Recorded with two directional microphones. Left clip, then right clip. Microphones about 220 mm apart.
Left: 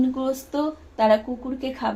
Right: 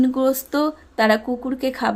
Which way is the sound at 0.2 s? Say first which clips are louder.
Right 6 dB; 35° right (ahead or behind).